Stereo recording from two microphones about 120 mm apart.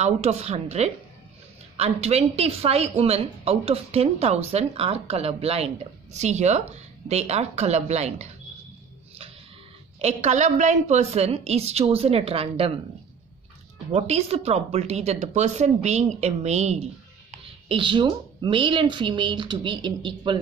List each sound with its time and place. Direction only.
0.0 s speech: 65° right (ahead or behind)
6.1 s speech: 70° right (ahead or behind)
9.9 s speech: 65° right (ahead or behind)
13.9 s speech: 65° right (ahead or behind)
17.6 s speech: 40° right (ahead or behind)